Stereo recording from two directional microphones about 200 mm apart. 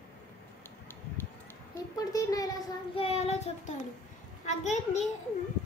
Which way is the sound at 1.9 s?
20° left (ahead or behind).